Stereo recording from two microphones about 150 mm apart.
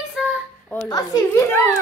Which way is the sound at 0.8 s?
25° left (ahead or behind).